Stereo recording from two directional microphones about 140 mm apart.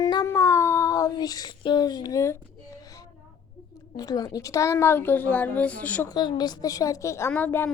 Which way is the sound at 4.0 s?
25° left (ahead or behind).